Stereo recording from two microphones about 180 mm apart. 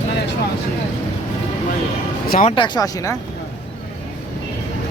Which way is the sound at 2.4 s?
30° left (ahead or behind).